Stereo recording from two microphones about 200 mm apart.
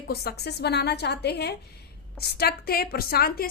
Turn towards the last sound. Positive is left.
turn(degrees=50)  # may be behind; listen again after turning